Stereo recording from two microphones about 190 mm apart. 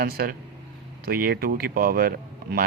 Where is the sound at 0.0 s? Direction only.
50° right (ahead or behind).